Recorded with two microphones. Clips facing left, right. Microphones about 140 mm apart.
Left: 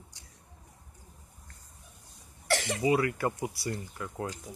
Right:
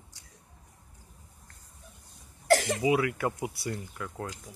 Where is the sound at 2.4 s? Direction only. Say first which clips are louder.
Right 7 dB; 45° right (ahead or behind).